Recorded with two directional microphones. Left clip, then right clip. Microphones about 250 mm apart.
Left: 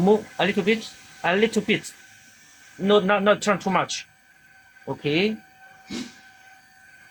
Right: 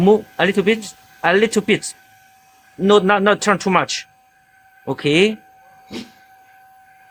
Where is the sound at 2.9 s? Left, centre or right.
Right.